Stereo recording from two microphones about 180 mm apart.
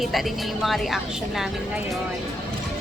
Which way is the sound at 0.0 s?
Centre (ahead or behind).